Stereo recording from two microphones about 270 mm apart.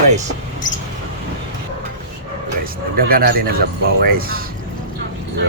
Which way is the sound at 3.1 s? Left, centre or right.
Right.